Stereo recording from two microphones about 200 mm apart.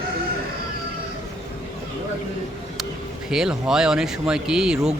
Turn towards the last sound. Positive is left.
turn(degrees=-5)  # may be behind; listen again after turning